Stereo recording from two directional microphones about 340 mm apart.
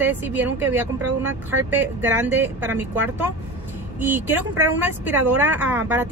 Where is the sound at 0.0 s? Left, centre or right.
Centre.